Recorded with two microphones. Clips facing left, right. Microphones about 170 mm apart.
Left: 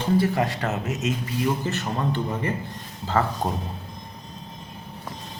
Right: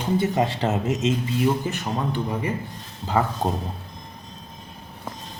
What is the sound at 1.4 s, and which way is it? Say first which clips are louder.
Speech: even; 15° right (ahead or behind).